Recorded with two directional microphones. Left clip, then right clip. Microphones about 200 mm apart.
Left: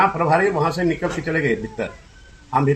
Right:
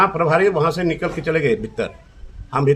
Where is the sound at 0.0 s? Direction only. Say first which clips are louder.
Right 1 dB; 30° right (ahead or behind).